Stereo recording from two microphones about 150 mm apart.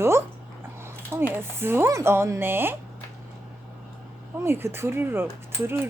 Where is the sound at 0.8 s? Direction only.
15° right (ahead or behind).